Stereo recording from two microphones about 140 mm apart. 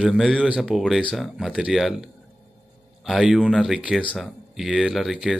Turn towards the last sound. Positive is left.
turn(degrees=0)  # may be behind; listen again after turning